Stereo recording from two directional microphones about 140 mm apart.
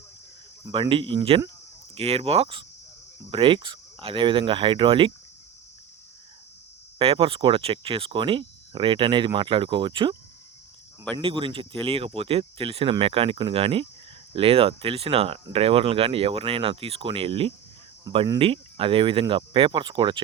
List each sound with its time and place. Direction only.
0.7 s speech: 40° right (ahead or behind)
7.0 s speech: 40° right (ahead or behind)